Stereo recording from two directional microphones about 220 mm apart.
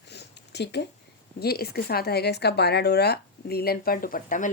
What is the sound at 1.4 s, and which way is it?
Speech, 45° left (ahead or behind).